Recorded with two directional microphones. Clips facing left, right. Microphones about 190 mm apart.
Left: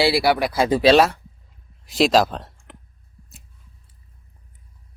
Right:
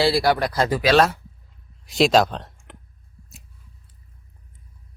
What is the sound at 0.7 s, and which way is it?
Speech, 30° left (ahead or behind).